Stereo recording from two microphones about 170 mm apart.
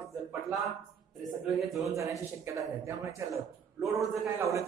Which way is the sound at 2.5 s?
15° right (ahead or behind).